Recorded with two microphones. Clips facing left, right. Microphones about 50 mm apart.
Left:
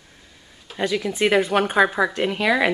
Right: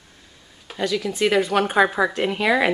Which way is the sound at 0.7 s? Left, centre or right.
Centre.